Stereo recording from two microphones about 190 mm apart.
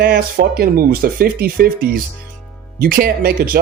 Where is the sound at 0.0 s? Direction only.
55° right (ahead or behind).